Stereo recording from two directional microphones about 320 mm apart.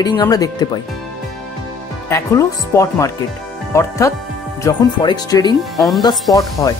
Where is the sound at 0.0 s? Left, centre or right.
Centre.